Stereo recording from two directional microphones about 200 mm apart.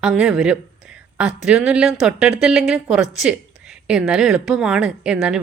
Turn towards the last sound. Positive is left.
turn(degrees=-5)  # may be behind; listen again after turning